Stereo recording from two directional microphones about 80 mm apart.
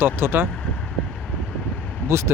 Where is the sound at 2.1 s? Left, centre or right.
Right.